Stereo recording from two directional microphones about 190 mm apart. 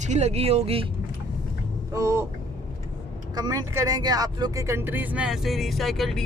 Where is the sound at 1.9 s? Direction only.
15° right (ahead or behind).